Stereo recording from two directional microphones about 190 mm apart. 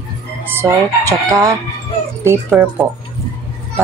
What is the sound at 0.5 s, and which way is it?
Speech, 15° right (ahead or behind).